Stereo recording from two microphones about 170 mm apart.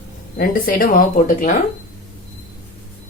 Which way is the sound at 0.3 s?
60° left (ahead or behind).